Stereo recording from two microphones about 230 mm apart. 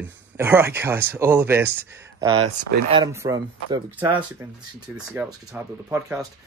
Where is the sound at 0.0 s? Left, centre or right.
Centre.